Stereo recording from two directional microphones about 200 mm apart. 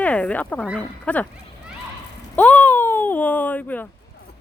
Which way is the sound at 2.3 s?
10° left (ahead or behind).